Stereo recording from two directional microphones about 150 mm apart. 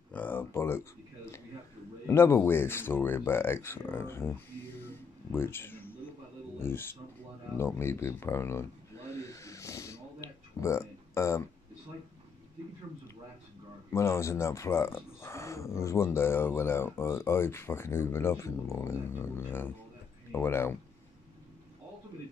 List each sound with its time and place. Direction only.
0.1 s a sound: 15° left (ahead or behind)
2.0 s speech: 15° left (ahead or behind)
4.8 s music: 15° left (ahead or behind)
6.6 s speech: 15° left (ahead or behind)
7.5 s a sound: 15° left (ahead or behind)
13.9 s speech: 20° left (ahead or behind)